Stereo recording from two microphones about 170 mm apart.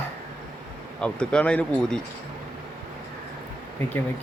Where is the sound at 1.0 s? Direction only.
5° left (ahead or behind).